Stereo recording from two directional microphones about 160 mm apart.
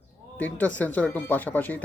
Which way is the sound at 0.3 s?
10° left (ahead or behind).